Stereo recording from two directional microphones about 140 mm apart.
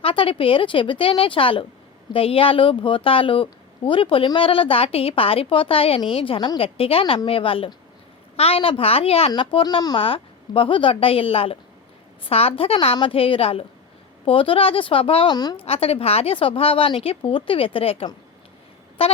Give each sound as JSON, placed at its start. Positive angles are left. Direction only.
{"t": 0.0, "sound": "a woman's voice", "side_deg": 40}
{"t": 15.5, "sound": "a woman's voice", "side_deg": 45}